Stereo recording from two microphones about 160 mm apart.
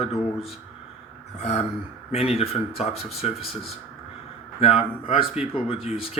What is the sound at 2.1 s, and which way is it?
Speech, 40° left (ahead or behind).